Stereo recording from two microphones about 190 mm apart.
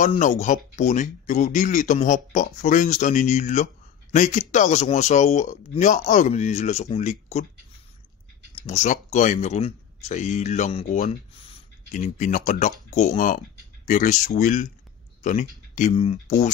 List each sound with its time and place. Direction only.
0.2 s speech: 40° left (ahead or behind)
8.6 s speech: 40° left (ahead or behind)